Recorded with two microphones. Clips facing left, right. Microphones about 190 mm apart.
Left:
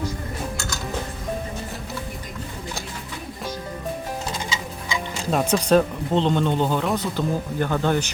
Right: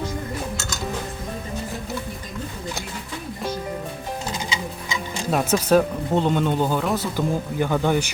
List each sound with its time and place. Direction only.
5.3 s speech: 5° right (ahead or behind)